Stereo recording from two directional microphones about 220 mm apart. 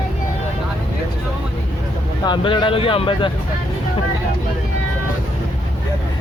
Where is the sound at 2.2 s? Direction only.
20° left (ahead or behind).